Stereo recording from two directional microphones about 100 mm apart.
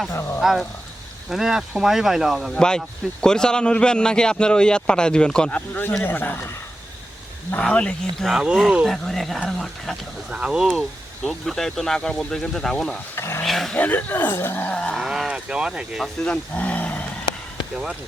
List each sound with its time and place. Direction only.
0.1 s speech: 30° left (ahead or behind)
1.3 s speech: 5° right (ahead or behind)
2.6 s a man's voice: 5° left (ahead or behind)
7.5 s a man's voice: 15° left (ahead or behind)
8.2 s speech: 5° right (ahead or behind)
10.3 s speech: 10° right (ahead or behind)
10.7 s speech: 5° left (ahead or behind)
13.1 s speech: 25° left (ahead or behind)
13.4 s speech: 5° left (ahead or behind)
13.7 s a man's voice: 15° left (ahead or behind)
15.0 s speech: 5° right (ahead or behind)
16.2 s a man's voice: 15° left (ahead or behind)